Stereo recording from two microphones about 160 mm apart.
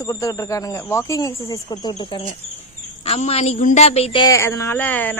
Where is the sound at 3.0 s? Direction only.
40° left (ahead or behind).